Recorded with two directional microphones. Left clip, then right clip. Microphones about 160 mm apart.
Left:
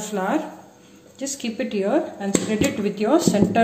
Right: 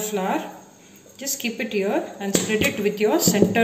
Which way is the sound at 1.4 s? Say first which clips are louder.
Right 1 dB; 45° left (ahead or behind).